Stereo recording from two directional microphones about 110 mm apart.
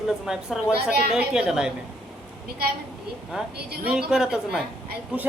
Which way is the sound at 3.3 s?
5° right (ahead or behind).